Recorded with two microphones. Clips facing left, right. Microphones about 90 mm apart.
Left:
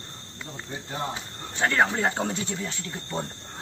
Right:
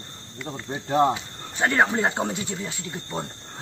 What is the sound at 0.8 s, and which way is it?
Speech, 65° right (ahead or behind).